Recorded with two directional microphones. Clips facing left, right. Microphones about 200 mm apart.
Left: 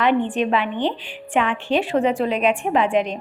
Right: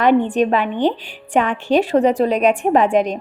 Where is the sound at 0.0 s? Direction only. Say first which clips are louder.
Right 5 dB; 40° right (ahead or behind).